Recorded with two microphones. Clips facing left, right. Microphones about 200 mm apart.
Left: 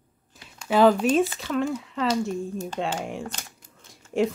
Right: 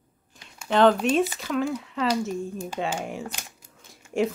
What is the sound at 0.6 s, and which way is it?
Speech, 5° left (ahead or behind).